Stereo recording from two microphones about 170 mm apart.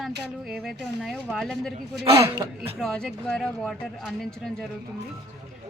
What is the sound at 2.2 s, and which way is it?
Speech, 20° right (ahead or behind).